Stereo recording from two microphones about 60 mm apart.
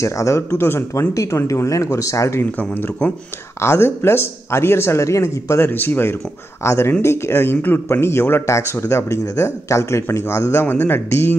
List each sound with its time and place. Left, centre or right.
0.0 s speech: left
1.1 s speech: left
2.7 s speech: left
5.7 s speech: left
6.6 s speech: left